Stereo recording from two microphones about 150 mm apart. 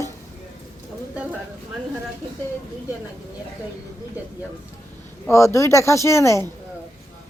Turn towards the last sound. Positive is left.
turn(degrees=20)  # may be behind; listen again after turning